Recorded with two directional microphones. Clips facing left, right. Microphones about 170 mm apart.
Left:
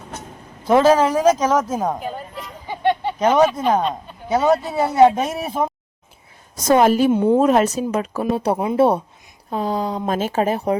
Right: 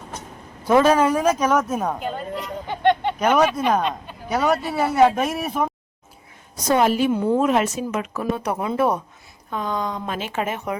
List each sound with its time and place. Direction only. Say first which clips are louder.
0.7 s speech: left 2 dB; 30° left (ahead or behind)
2.0 s a sound: right 2 dB; 5° left (ahead or behind)
3.2 s speech: left 3 dB; 25° left (ahead or behind)
6.7 s a woman's voice: left 4 dB; 45° left (ahead or behind)
7.1 s speech: left 4 dB; 20° left (ahead or behind)
7.3 s speech: left 4 dB; 40° left (ahead or behind)